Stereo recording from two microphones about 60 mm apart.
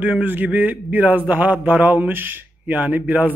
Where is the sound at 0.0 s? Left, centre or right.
Right.